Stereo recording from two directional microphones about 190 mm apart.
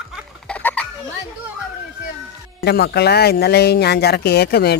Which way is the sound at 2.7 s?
60° left (ahead or behind).